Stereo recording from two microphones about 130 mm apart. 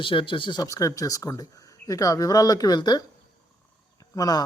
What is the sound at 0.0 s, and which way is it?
Speech, 40° left (ahead or behind).